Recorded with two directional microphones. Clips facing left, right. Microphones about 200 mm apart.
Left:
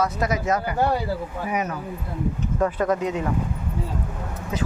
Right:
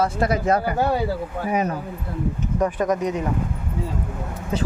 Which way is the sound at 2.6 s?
15° right (ahead or behind).